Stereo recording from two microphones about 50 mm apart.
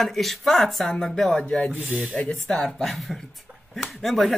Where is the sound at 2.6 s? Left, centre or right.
Centre.